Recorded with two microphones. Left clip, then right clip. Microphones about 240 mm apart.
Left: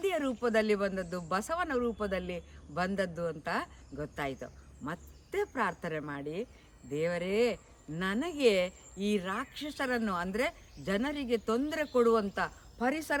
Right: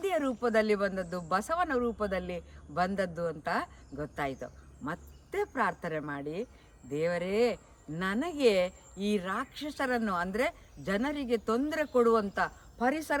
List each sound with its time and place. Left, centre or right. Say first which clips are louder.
0.0 s speech: right 1 dB; centre